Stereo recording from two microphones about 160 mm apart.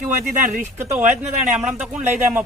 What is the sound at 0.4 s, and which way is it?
Speech, 50° right (ahead or behind).